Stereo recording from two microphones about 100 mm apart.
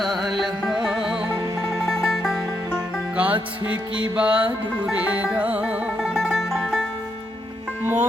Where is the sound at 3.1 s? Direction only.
15° right (ahead or behind); by 6.8 s 5° left (ahead or behind).